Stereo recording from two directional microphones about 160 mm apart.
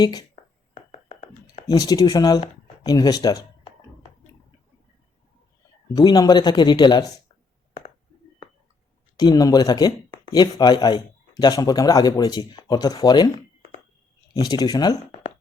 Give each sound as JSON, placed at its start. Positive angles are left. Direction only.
{"t": 0.0, "sound": "speech", "side_deg": 25}
{"t": 0.9, "sound": "a sound", "side_deg": 40}
{"t": 1.6, "sound": "speech", "side_deg": 25}
{"t": 5.9, "sound": "speech", "side_deg": 25}
{"t": 9.1, "sound": "speech", "side_deg": 25}
{"t": 14.3, "sound": "speech", "side_deg": 25}